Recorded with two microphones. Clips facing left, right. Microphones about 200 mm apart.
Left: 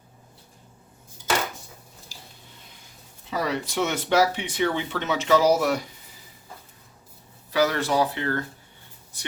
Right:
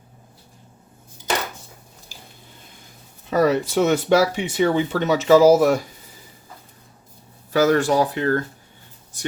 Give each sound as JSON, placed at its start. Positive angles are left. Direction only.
{"t": 3.2, "sound": "speech", "side_deg": -45}
{"t": 7.5, "sound": "speech", "side_deg": -45}